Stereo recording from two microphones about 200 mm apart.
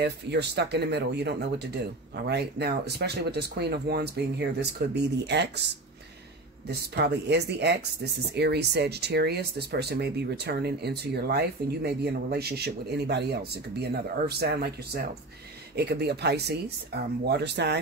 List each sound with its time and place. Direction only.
0.0 s speech: 55° right (ahead or behind)